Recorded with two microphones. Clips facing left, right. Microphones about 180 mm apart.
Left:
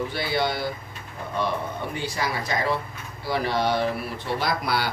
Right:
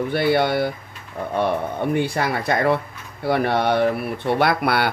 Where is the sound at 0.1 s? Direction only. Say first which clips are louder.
Right 7 dB; 55° right (ahead or behind).